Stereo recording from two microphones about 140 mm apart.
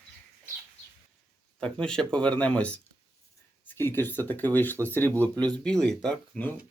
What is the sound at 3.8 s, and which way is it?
Speech, 15° left (ahead or behind).